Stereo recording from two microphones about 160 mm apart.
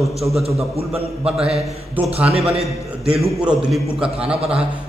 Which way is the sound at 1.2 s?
5° right (ahead or behind).